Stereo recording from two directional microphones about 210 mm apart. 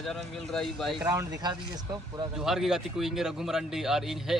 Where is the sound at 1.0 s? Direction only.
15° right (ahead or behind).